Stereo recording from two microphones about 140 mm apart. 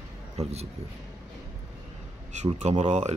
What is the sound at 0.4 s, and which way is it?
Speech, 50° right (ahead or behind).